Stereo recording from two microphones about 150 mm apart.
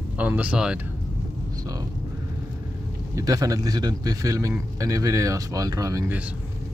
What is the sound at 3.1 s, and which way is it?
A man's voice, 25° right (ahead or behind).